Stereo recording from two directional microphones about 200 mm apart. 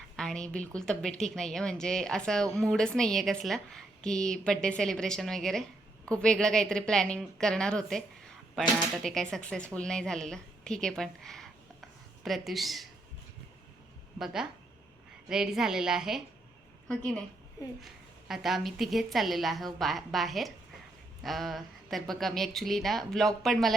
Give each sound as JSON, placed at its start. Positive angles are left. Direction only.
{"t": 0.2, "sound": "a woman's voice", "side_deg": 5}
{"t": 15.3, "sound": "a woman's voice", "side_deg": -5}
{"t": 18.3, "sound": "a woman's voice", "side_deg": 0}